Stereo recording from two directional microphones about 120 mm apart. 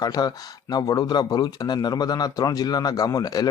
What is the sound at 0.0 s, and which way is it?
Speech, 35° left (ahead or behind).